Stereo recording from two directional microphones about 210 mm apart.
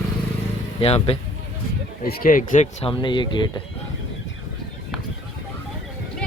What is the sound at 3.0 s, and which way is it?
Speech, 20° left (ahead or behind).